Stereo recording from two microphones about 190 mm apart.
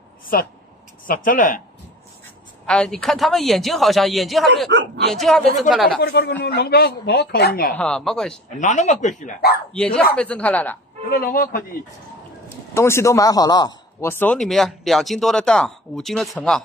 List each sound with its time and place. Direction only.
1.0 s speech: 45° left (ahead or behind)
2.6 s speech: 5° left (ahead or behind)
4.7 s speech: 70° right (ahead or behind)
5.1 s speech: centre (ahead or behind)
6.0 s speech: 60° left (ahead or behind)
7.7 s speech: 5° left (ahead or behind)
8.5 s speech: 40° left (ahead or behind)
9.7 s speech: 5° left (ahead or behind)
11.1 s speech: 55° left (ahead or behind)
12.7 s speech: 15° left (ahead or behind)
14.0 s speech: 10° left (ahead or behind)